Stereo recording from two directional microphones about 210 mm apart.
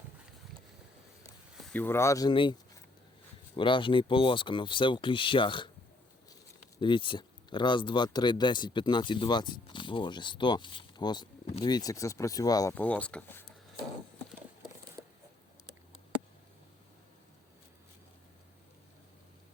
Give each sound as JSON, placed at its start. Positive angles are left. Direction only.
{"t": 1.7, "sound": "speech", "side_deg": 10}
{"t": 6.7, "sound": "speech", "side_deg": 25}